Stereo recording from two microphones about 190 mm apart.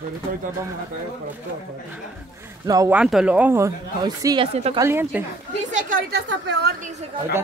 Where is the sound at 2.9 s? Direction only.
5° right (ahead or behind).